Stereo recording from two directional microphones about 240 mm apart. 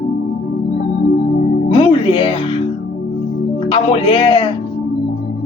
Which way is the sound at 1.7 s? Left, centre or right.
Left.